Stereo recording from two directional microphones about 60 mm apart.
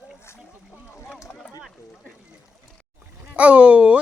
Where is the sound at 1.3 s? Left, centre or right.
Left.